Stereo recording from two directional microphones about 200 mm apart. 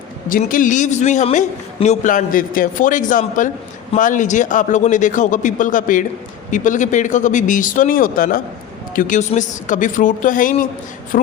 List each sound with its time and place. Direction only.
0.3 s a man's voice: 40° left (ahead or behind)